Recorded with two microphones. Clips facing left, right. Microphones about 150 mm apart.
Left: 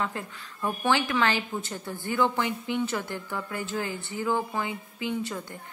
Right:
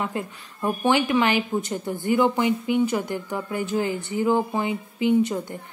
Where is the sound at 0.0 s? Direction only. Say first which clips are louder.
Right 4 dB; 15° right (ahead or behind).